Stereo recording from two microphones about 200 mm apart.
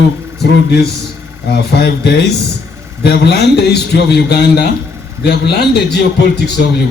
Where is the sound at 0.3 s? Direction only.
55° left (ahead or behind).